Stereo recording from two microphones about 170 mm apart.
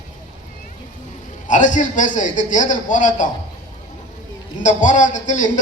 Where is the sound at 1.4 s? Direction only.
50° left (ahead or behind).